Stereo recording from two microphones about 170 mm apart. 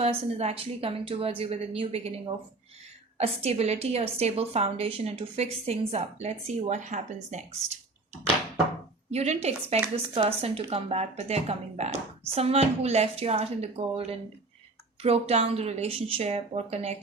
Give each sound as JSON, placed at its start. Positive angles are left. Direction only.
{"t": 0.0, "sound": "a woman's voice", "side_deg": -35}
{"t": 9.0, "sound": "a woman's voice", "side_deg": -40}